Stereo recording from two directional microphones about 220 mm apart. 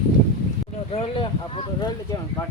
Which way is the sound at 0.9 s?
25° left (ahead or behind).